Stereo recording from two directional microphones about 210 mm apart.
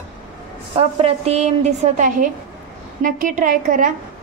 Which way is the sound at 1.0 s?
30° right (ahead or behind).